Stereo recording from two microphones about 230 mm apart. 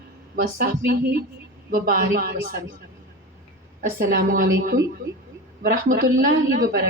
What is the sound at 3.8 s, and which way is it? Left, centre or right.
A woman's voice, right.